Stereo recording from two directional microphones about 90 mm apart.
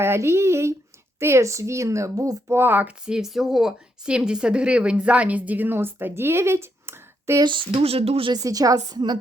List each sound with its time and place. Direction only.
0.0 s a woman's voice: 30° right (ahead or behind)
2.5 s speech: 25° right (ahead or behind)
3.1 s speech: 5° right (ahead or behind); by 7.4 s 30° right (ahead or behind)
7.4 s speech: 70° right (ahead or behind); by 8.3 s 90° right
8.3 s a woman's voice: 40° right (ahead or behind)